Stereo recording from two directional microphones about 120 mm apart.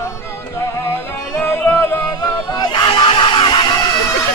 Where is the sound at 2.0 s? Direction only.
35° left (ahead or behind).